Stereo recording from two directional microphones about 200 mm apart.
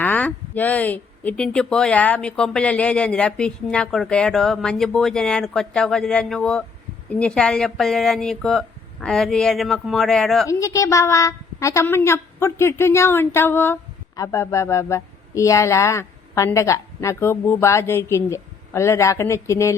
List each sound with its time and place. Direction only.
0.0 s speech: 10° left (ahead or behind)
10.4 s a woman's voice: 15° left (ahead or behind)